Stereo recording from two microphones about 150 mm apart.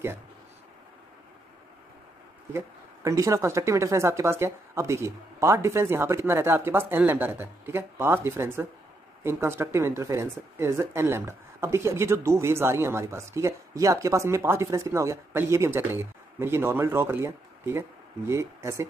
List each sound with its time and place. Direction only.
2.5 s speech: 20° right (ahead or behind)